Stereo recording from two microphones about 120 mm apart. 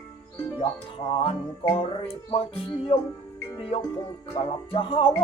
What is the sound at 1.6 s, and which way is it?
Music, 50° left (ahead or behind).